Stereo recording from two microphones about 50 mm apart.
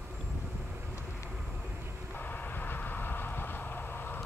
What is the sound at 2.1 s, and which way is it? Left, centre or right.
Vehicle, left.